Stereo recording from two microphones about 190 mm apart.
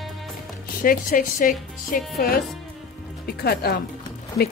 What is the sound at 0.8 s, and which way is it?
Speech, 45° left (ahead or behind).